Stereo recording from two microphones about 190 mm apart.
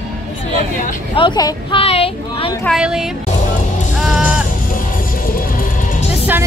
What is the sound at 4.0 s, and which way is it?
Music, 5° right (ahead or behind).